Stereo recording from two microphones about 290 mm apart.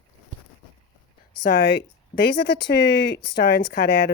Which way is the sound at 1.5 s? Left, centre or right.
Left.